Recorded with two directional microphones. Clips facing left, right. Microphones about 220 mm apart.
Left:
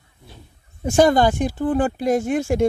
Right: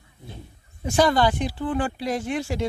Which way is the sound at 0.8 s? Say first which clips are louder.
Left 5 dB; 45° left (ahead or behind).